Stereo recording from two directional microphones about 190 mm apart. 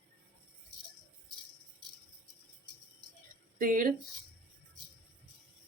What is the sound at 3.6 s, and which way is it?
Speech, 45° right (ahead or behind).